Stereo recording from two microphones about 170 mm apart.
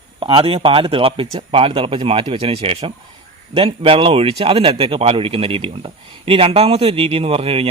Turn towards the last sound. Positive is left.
turn(degrees=-35)  # may be behind; listen again after turning